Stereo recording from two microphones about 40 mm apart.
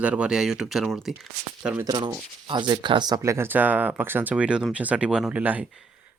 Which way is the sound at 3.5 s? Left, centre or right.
Right.